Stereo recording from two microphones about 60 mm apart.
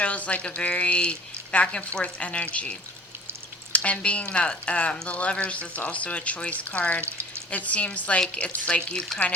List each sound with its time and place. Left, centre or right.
0.0 s speech: left
7.0 s a sound: right
7.5 s speech: left